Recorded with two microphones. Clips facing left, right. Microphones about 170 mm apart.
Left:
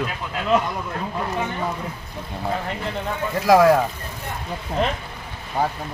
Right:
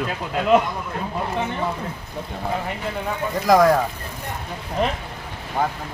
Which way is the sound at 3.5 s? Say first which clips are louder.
Left 1 dB; 5° left (ahead or behind).